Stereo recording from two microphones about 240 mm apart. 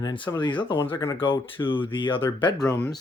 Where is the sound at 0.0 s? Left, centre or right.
Centre.